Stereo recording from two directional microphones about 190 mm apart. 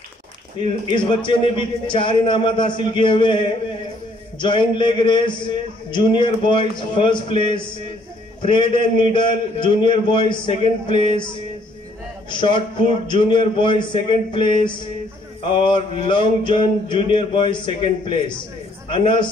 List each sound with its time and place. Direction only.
0.8 s a man's voice: 25° left (ahead or behind)
12.3 s a man's voice: 25° left (ahead or behind)